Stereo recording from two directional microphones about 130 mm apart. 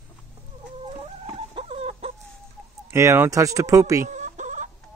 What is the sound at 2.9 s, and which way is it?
Speech, 20° right (ahead or behind).